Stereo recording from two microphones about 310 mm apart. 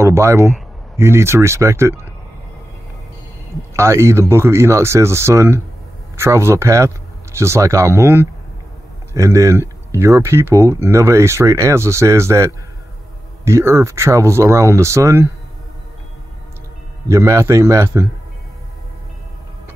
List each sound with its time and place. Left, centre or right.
0.0 s a sound: centre
0.9 s speech: centre
3.7 s speech: centre
9.1 s speech: centre
17.1 s speech: centre